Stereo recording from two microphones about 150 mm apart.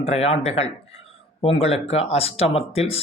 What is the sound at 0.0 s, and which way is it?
Speech, 45° left (ahead or behind).